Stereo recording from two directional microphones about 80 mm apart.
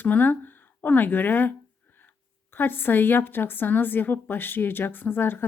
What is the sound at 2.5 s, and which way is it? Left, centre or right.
A woman's voice, left.